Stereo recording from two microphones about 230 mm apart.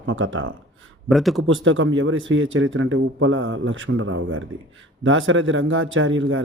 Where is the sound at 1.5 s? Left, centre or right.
Right.